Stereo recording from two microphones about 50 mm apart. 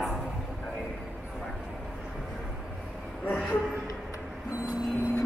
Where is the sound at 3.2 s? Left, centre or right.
Left.